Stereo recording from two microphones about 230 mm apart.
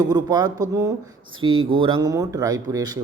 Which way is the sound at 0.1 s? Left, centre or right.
Centre.